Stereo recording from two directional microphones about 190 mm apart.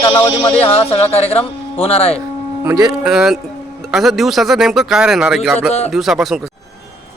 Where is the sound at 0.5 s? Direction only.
30° left (ahead or behind).